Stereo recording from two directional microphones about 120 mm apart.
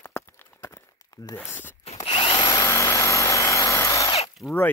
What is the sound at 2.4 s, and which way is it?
Vehicle, 25° left (ahead or behind).